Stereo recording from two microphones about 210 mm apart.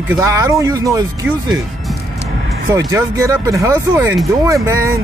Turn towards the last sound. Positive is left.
turn(degrees=-15)  # may be behind; listen again after turning